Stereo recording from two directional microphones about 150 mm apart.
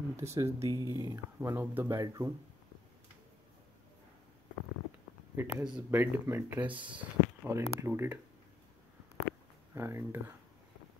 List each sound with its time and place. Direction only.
0.1 s speech: 20° right (ahead or behind)
5.3 s speech: 15° right (ahead or behind)
5.9 s speech: 15° right (ahead or behind)
9.8 s speech: 20° right (ahead or behind)